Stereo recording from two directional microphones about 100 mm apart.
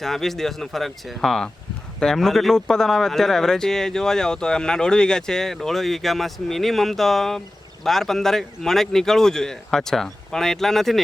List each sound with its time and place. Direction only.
0.0 s speech: 5° left (ahead or behind)